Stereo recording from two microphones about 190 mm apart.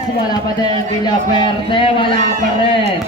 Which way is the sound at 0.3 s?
20° left (ahead or behind).